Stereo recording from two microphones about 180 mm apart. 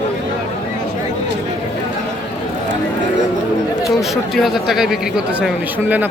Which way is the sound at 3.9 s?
Centre (ahead or behind).